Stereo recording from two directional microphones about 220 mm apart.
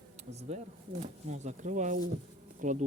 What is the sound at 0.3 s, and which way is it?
Speech, 30° right (ahead or behind).